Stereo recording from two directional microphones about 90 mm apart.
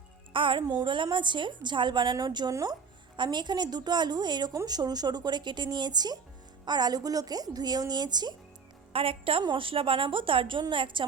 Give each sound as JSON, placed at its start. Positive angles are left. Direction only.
{"t": 0.3, "sound": "a woman's voice", "side_deg": -70}
{"t": 2.5, "sound": "speech", "side_deg": -40}
{"t": 3.2, "sound": "a woman's voice", "side_deg": -55}
{"t": 8.9, "sound": "a woman's voice", "side_deg": -90}
{"t": 9.4, "sound": "a woman's voice", "side_deg": -70}